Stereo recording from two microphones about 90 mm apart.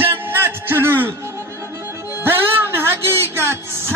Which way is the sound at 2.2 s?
25° right (ahead or behind).